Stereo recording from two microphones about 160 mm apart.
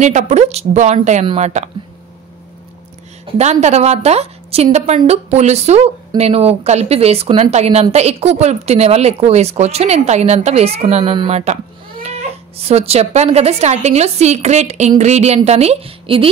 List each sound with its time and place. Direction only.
0.0 s speech: 45° right (ahead or behind)
3.3 s a woman's voice: 45° right (ahead or behind)